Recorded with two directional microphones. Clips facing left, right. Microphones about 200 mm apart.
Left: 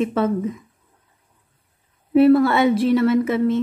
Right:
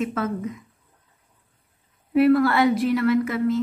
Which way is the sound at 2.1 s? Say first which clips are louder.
Left 4 dB; 25° left (ahead or behind).